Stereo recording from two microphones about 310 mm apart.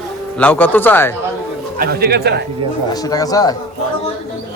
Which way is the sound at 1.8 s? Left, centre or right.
Right.